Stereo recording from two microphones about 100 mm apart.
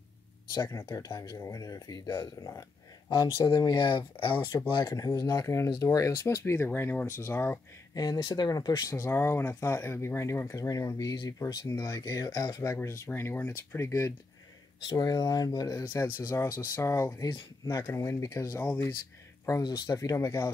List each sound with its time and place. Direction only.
0.6 s speech: 35° left (ahead or behind); by 4.4 s 55° left (ahead or behind)
4.8 s speech: 35° left (ahead or behind)
7.9 s speech: 40° left (ahead or behind)
8.9 s speech: 25° left (ahead or behind)
14.9 s speech: 40° left (ahead or behind)
15.8 s speech: 25° left (ahead or behind)
19.6 s speech: 40° left (ahead or behind)